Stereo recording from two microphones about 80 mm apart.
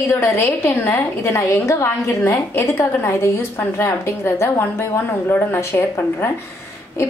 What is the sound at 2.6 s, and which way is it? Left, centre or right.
A woman's voice, left.